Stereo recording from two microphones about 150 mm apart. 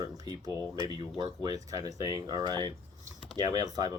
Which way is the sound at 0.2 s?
25° right (ahead or behind).